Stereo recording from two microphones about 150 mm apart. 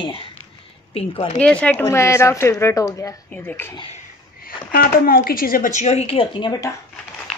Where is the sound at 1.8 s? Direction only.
20° left (ahead or behind).